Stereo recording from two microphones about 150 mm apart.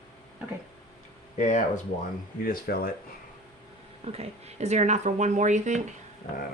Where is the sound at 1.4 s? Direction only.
55° left (ahead or behind).